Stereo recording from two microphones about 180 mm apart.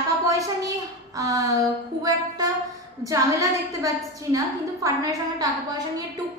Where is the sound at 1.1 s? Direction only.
20° right (ahead or behind).